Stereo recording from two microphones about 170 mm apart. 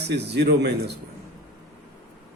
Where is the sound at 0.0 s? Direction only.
80° right.